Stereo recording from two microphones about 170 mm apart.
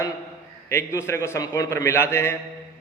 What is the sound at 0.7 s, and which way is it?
A man's voice, 15° left (ahead or behind).